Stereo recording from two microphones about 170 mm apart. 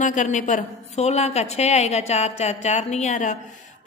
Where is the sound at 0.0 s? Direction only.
45° left (ahead or behind).